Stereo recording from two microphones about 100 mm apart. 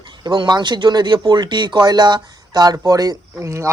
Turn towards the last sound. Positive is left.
turn(degrees=-30)  # may be behind; listen again after turning